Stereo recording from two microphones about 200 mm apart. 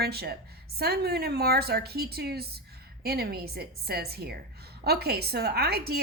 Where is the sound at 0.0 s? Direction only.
50° right (ahead or behind).